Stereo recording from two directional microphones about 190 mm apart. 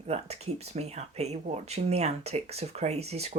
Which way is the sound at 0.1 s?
35° right (ahead or behind).